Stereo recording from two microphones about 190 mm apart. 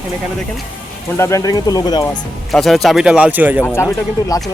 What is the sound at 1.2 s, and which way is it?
Speech, 15° left (ahead or behind).